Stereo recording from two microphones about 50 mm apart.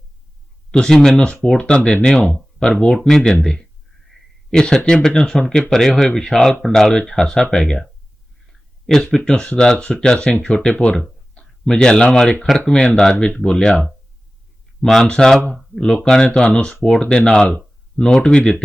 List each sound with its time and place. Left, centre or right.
0.7 s speech: centre
2.6 s speech: left
8.9 s speech: centre
15.0 s speech: centre